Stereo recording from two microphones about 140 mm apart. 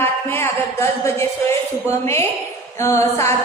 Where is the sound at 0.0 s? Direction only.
15° left (ahead or behind).